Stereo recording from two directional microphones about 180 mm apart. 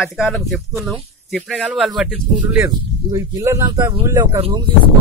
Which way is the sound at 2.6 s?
15° right (ahead or behind).